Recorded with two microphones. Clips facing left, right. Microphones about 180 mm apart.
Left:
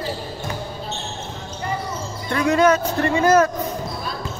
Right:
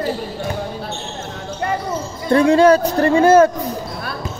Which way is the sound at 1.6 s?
65° right (ahead or behind).